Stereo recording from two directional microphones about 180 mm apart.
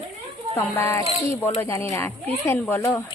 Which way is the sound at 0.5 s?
15° left (ahead or behind).